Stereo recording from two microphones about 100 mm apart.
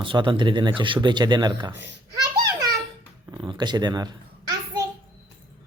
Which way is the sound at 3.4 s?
50° right (ahead or behind).